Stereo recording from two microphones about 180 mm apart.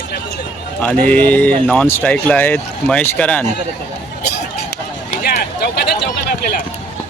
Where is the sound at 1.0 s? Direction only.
10° left (ahead or behind).